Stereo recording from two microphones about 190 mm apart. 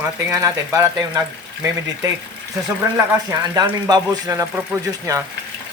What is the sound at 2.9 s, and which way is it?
Speech, 20° right (ahead or behind).